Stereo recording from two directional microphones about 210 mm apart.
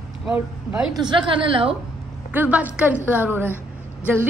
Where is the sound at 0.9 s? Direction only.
20° right (ahead or behind).